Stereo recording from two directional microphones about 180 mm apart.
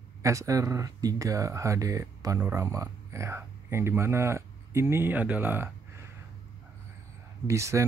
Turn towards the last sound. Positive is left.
turn(degrees=-15)  # may be behind; listen again after turning